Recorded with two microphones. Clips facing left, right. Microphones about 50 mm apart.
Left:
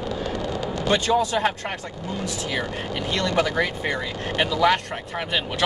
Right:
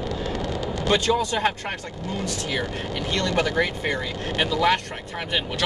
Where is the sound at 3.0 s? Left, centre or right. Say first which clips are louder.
Left 1 dB; centre.